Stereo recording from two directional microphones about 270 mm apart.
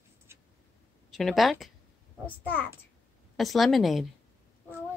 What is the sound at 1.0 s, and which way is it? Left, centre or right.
A woman's voice, centre.